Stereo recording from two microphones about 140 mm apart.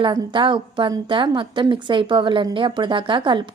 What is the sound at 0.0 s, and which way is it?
A woman's voice, 35° right (ahead or behind).